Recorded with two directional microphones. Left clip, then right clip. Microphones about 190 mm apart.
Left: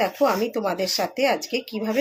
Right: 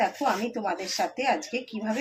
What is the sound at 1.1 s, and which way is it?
Speech, 60° left (ahead or behind).